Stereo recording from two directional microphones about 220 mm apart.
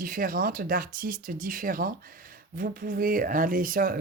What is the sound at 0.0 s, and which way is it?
Speech, 40° right (ahead or behind).